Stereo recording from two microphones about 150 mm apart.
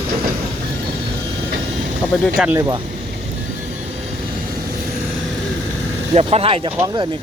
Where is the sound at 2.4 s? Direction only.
5° right (ahead or behind).